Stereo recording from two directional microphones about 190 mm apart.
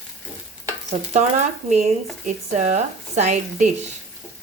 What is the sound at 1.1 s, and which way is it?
Speech, 40° right (ahead or behind).